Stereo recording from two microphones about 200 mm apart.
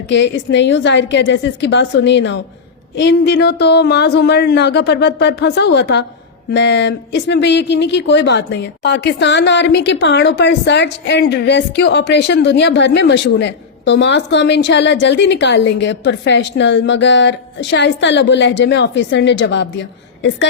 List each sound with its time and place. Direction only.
0.1 s speech: 60° left (ahead or behind)